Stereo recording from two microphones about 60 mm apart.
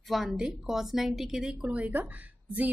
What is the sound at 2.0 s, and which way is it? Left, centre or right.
Speech, right.